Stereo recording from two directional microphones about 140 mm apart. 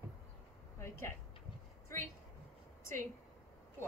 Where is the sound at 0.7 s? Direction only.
20° left (ahead or behind).